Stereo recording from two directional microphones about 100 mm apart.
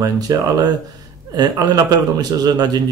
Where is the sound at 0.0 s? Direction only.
40° right (ahead or behind).